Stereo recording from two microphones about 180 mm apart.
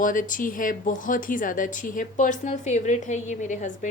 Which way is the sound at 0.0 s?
45° left (ahead or behind).